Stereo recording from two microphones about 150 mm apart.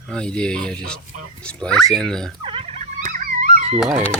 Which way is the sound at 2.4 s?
35° right (ahead or behind).